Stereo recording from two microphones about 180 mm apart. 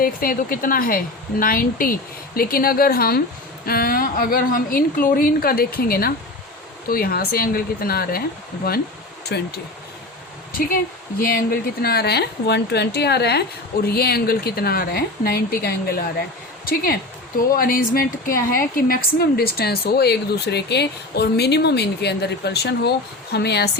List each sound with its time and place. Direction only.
0.0 s a woman's voice: 55° left (ahead or behind)
9.3 s speech: 65° left (ahead or behind)
10.5 s a woman's voice: 50° left (ahead or behind)